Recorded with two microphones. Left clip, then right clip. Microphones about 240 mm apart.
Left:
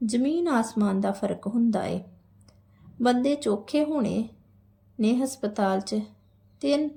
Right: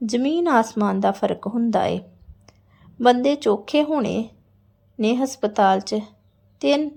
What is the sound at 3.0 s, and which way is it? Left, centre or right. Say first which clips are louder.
A woman's voice: right 7 dB; centre.